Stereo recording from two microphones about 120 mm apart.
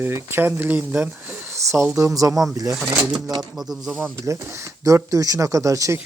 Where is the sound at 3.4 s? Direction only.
Centre (ahead or behind).